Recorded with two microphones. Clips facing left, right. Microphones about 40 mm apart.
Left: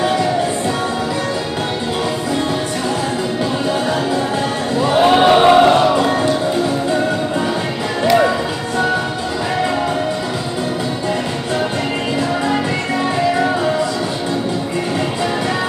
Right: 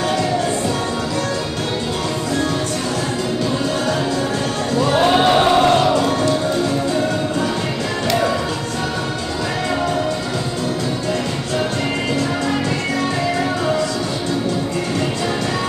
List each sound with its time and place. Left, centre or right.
4.7 s music: centre